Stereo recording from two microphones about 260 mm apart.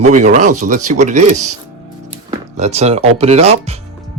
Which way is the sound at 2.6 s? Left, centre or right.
Right.